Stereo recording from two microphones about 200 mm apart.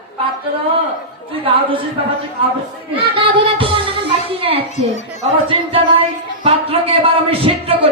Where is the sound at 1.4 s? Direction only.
25° right (ahead or behind).